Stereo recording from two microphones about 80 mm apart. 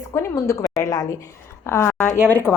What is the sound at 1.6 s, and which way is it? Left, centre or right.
A woman's voice, left.